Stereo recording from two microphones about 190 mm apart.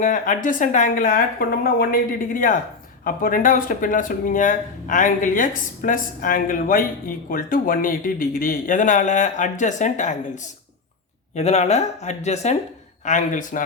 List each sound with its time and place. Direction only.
0.0 s speech: 45° left (ahead or behind)